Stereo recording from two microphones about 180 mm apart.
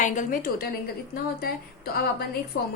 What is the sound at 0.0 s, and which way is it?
A woman's voice, 50° left (ahead or behind).